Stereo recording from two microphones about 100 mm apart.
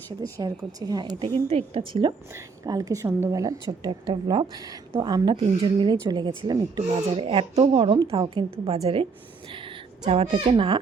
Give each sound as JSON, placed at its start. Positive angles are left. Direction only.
{"t": 0.2, "sound": "speech", "side_deg": -35}
{"t": 1.2, "sound": "a woman's voice", "side_deg": -75}
{"t": 2.6, "sound": "speech", "side_deg": -40}
{"t": 4.5, "sound": "speech", "side_deg": -40}
{"t": 5.3, "sound": "speech", "side_deg": -60}
{"t": 7.1, "sound": "a woman's voice", "side_deg": -75}
{"t": 9.5, "sound": "speech", "side_deg": -55}